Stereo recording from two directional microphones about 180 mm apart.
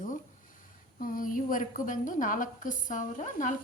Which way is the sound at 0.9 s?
50° left (ahead or behind).